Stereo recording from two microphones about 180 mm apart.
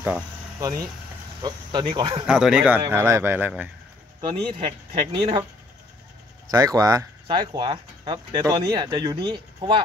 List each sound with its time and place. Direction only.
1.4 s speech: 25° right (ahead or behind)
2.2 s speech: 5° right (ahead or behind)
4.2 s speech: 30° right (ahead or behind)
6.5 s speech: 20° right (ahead or behind)